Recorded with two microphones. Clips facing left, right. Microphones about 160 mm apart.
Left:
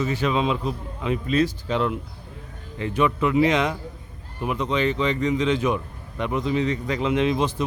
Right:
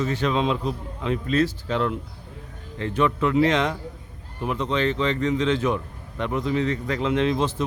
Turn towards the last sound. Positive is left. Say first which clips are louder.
# even
turn(degrees=15)  # may be behind; listen again after turning